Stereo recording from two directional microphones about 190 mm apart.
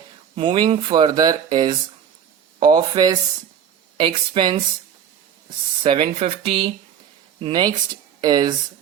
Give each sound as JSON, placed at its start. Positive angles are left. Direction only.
{"t": 0.3, "sound": "speech", "side_deg": -25}
{"t": 5.8, "sound": "speech", "side_deg": -30}